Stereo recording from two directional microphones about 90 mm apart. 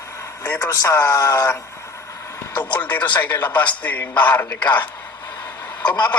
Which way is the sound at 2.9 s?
15° left (ahead or behind).